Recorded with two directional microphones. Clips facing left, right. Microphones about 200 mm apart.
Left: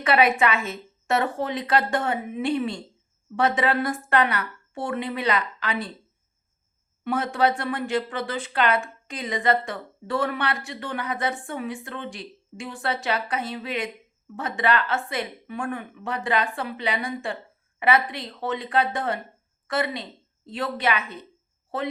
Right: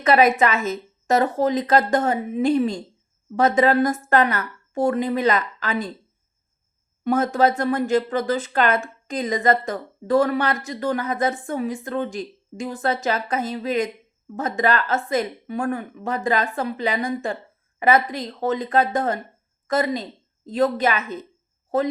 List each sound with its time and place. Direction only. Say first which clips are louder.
0.0 s a woman's voice: right 4 dB; 40° right (ahead or behind)
7.0 s a woman's voice: right 4 dB; 40° right (ahead or behind)